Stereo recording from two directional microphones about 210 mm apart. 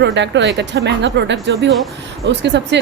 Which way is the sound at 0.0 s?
55° right (ahead or behind).